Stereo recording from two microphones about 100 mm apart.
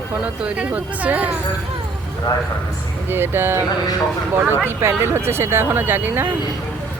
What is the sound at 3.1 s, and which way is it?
Speech, 25° right (ahead or behind).